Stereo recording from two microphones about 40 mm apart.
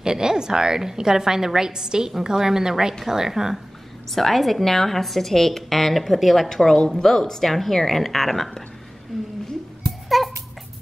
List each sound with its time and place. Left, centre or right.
0.0 s a woman's voice: centre
4.1 s a woman's voice: centre
9.1 s a sound: centre